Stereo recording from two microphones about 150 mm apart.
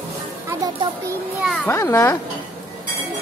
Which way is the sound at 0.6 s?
25° right (ahead or behind).